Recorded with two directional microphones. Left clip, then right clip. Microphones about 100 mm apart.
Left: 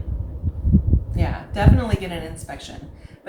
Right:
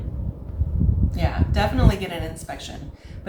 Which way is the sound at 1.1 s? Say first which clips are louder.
Right 1 dB; 40° right (ahead or behind).